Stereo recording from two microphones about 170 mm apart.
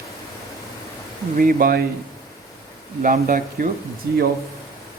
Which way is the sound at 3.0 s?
55° right (ahead or behind).